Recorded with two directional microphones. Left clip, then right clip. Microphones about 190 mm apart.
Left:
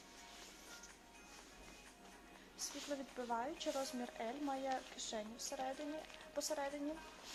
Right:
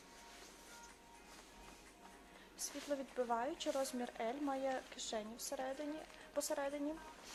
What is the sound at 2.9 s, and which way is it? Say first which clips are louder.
Speech: right 5 dB; 40° right (ahead or behind).